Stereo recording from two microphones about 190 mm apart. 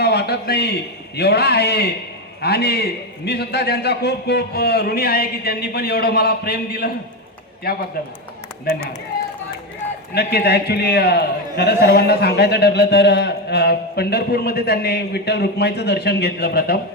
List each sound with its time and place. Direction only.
0.0 s a man's voice: 60° left (ahead or behind)
10.2 s a man's voice: 55° left (ahead or behind)